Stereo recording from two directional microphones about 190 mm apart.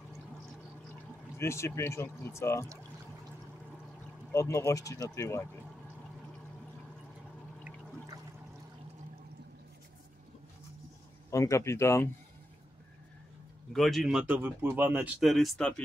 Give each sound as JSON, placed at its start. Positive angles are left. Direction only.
{"t": 1.4, "sound": "speech", "side_deg": 15}
{"t": 4.3, "sound": "speech", "side_deg": 15}
{"t": 11.2, "sound": "speech", "side_deg": 15}
{"t": 13.7, "sound": "speech", "side_deg": 0}